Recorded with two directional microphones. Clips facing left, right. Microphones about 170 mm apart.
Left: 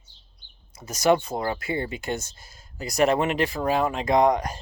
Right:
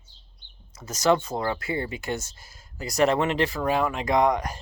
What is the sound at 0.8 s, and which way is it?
Speech, 10° left (ahead or behind).